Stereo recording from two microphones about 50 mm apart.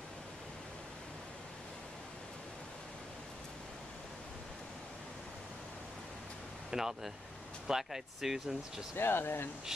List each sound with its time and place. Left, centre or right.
6.7 s speech: centre
8.9 s speech: left